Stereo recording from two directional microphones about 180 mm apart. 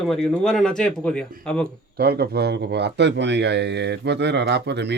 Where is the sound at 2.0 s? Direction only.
60° right (ahead or behind).